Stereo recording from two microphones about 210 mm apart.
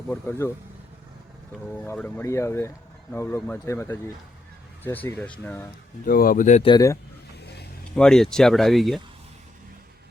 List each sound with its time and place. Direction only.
0.1 s speech: 10° left (ahead or behind)
1.6 s speech: 10° left (ahead or behind)
6.1 s speech: 45° left (ahead or behind)
6.7 s speech: 15° left (ahead or behind)
7.9 s speech: 5° left (ahead or behind)